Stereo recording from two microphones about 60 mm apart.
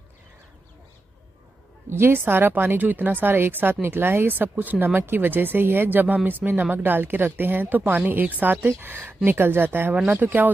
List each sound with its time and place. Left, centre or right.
2.0 s speech: right